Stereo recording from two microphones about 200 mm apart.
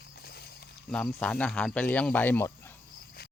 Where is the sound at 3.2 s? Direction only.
50° left (ahead or behind).